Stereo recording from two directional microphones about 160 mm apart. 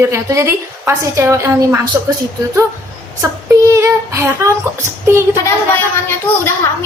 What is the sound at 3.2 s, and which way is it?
Speech, 20° right (ahead or behind).